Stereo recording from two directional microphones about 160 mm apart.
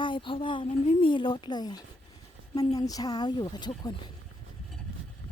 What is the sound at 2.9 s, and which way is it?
A woman's voice, 25° left (ahead or behind).